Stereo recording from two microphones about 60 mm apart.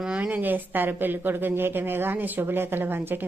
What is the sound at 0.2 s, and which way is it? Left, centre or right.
A woman's voice, right.